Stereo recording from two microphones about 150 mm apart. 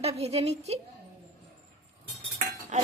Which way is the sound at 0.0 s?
45° right (ahead or behind).